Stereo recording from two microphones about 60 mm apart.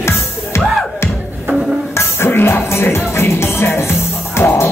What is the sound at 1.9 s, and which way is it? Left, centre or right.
Music, left.